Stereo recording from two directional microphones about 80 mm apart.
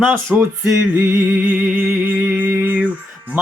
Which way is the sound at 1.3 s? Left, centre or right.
Centre.